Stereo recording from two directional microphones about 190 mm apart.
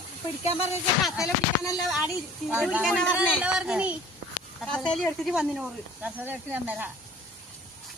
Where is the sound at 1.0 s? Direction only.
Centre (ahead or behind).